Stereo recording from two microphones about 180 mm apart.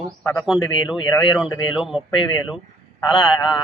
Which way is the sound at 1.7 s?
5° right (ahead or behind).